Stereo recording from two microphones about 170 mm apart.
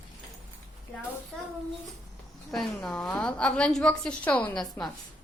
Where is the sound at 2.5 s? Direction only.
Centre (ahead or behind).